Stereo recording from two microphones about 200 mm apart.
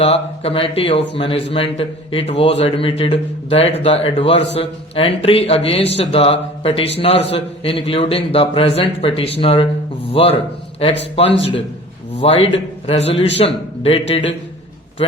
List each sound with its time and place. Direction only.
0.0 s a man's voice: 30° left (ahead or behind)
13.0 s a man's voice: 65° left (ahead or behind)
13.3 s a man's voice: 30° left (ahead or behind)